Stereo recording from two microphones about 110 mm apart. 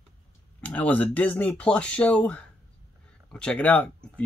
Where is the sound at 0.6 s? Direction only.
15° left (ahead or behind).